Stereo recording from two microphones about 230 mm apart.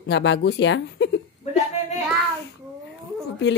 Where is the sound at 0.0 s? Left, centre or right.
Left.